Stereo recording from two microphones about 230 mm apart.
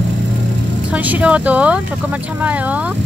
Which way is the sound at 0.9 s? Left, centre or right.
Centre.